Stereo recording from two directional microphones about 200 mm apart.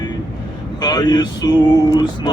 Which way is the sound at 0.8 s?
20° left (ahead or behind).